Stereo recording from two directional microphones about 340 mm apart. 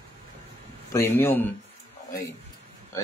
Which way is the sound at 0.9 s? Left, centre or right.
Centre.